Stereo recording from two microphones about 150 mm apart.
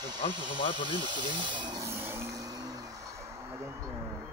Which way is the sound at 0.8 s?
30° right (ahead or behind).